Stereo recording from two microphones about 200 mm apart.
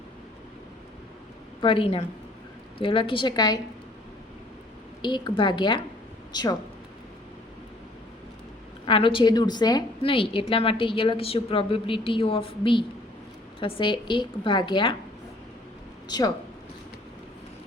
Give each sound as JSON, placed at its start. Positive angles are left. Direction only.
{"t": 1.6, "sound": "a woman's voice", "side_deg": 25}
{"t": 5.0, "sound": "a woman's voice", "side_deg": 20}
{"t": 8.9, "sound": "a woman's voice", "side_deg": 25}
{"t": 16.0, "sound": "speech", "side_deg": 20}